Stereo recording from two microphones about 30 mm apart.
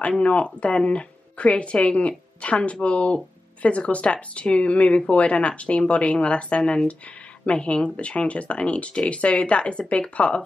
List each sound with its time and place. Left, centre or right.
0.2 s speech: left